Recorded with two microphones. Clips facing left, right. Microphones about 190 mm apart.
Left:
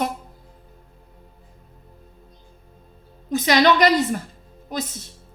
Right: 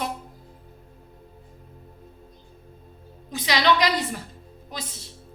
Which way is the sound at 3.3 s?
45° left (ahead or behind).